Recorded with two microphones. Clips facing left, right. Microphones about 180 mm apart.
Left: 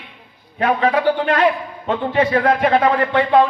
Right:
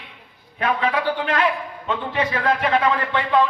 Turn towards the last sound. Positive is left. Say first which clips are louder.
# left 5 dB
turn(degrees=35)  # may be behind; listen again after turning